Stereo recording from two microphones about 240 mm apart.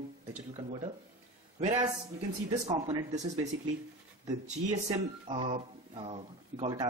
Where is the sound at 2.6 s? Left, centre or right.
Centre.